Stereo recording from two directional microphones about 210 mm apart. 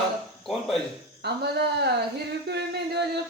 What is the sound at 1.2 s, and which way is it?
Speech, 50° right (ahead or behind).